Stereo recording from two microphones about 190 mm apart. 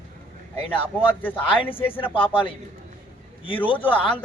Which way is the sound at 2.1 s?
25° left (ahead or behind).